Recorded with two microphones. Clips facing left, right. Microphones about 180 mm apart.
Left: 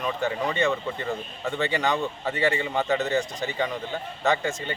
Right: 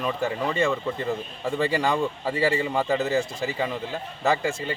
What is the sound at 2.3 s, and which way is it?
Speech, 30° right (ahead or behind).